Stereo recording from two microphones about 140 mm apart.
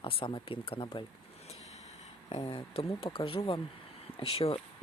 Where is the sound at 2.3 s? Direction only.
45° left (ahead or behind).